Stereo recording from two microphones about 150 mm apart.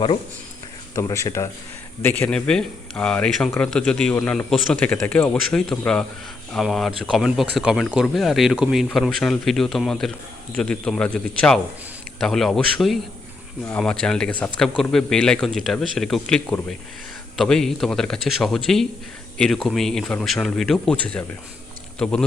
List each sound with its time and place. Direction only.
0.9 s a man's voice: 20° left (ahead or behind)